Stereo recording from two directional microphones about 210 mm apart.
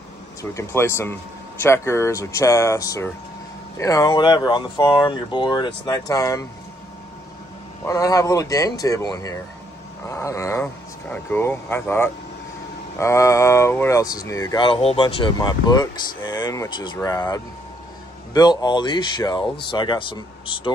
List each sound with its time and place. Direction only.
0.4 s speech: 15° left (ahead or behind)
7.8 s speech: 15° left (ahead or behind)